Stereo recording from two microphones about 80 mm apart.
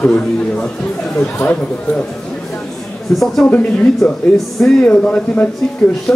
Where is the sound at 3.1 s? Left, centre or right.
Centre.